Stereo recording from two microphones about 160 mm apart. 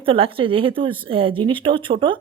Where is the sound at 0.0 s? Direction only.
35° right (ahead or behind).